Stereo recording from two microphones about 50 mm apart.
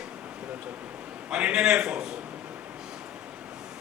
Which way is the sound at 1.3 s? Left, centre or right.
Centre.